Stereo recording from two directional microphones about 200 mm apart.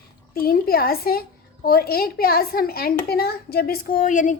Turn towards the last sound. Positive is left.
turn(degrees=40)  # may be behind; listen again after turning